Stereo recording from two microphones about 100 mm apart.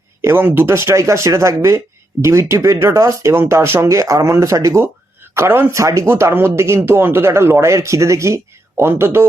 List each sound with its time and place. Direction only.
0.2 s speech: 25° right (ahead or behind)